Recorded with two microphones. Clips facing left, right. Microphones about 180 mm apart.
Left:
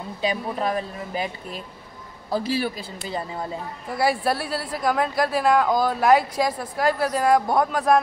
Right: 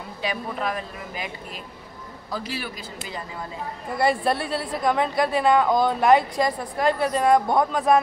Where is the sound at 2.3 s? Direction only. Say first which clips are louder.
Left 7 dB; 30° left (ahead or behind).